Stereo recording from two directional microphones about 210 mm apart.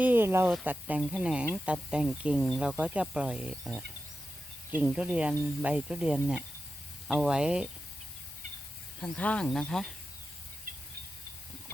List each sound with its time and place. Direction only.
0.0 s speech: 10° right (ahead or behind)
9.0 s speech: 5° left (ahead or behind)
10.7 s train: 40° right (ahead or behind)